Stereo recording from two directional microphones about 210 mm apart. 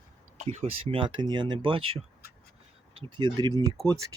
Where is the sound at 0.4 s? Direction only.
30° right (ahead or behind).